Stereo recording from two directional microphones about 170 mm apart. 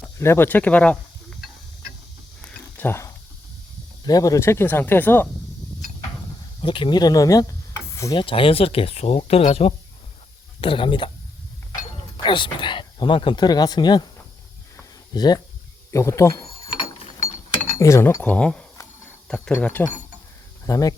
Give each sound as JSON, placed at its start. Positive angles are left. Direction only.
{"t": 0.2, "sound": "speech", "side_deg": 15}
{"t": 2.4, "sound": "a sound", "side_deg": 10}
{"t": 4.0, "sound": "speech", "side_deg": 20}
{"t": 6.6, "sound": "speech", "side_deg": 30}
{"t": 7.9, "sound": "stir", "side_deg": 20}
{"t": 8.2, "sound": "speech", "side_deg": 30}
{"t": 14.8, "sound": "a sound", "side_deg": 25}
{"t": 15.9, "sound": "speech", "side_deg": 15}
{"t": 17.7, "sound": "speech", "side_deg": 15}